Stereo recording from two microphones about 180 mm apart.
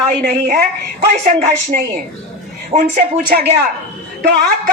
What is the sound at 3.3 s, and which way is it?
Speech, 60° right (ahead or behind).